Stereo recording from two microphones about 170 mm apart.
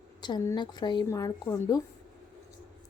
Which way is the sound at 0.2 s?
25° left (ahead or behind).